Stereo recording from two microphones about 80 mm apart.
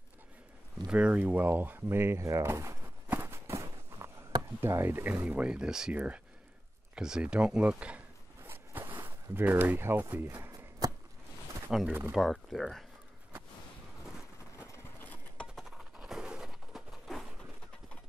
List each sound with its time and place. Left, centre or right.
0.8 s speech: centre; by 2.9 s right
3.1 s walk: right
4.6 s speech: right; by 8.0 s centre
8.5 s zipper: right
10.8 s a sound: right
11.7 s speech: centre
16.0 s bird: centre